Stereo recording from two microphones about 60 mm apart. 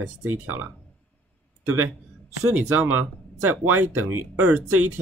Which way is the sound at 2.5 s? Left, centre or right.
Right.